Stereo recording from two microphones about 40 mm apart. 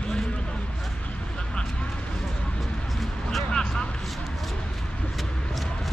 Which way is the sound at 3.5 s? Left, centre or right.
Centre.